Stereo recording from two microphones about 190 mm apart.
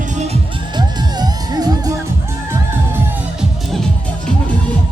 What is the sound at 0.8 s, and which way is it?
Music, 20° right (ahead or behind).